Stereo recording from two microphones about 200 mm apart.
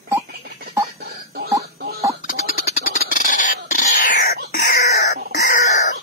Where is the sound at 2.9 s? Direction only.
40° left (ahead or behind).